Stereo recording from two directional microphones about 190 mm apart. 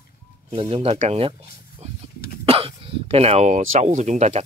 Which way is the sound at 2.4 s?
30° right (ahead or behind).